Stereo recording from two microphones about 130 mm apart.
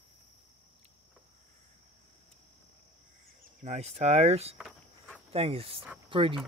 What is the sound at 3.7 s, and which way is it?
Speech, 55° right (ahead or behind).